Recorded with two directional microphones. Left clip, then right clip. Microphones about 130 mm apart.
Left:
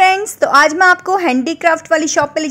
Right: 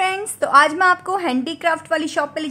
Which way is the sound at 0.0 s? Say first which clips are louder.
Left 9 dB; 40° left (ahead or behind).